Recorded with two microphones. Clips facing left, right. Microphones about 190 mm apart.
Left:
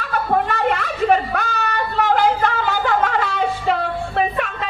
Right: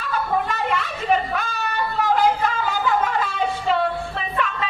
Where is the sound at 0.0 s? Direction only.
60° left (ahead or behind).